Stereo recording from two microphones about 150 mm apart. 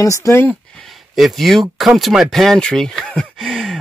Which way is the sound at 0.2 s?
15° left (ahead or behind).